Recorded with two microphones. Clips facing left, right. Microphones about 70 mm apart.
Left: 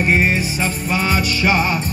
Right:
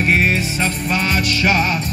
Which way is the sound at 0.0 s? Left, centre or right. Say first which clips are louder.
Even; centre.